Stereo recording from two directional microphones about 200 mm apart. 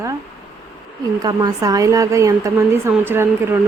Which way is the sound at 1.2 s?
20° right (ahead or behind).